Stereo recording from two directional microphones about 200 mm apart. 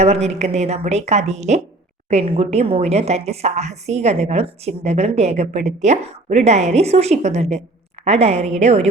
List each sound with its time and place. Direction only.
0.0 s a woman's voice: 35° right (ahead or behind)